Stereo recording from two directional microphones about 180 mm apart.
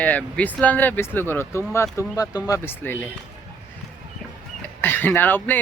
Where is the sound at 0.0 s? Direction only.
10° left (ahead or behind).